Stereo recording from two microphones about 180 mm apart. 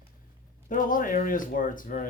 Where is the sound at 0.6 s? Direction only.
50° left (ahead or behind).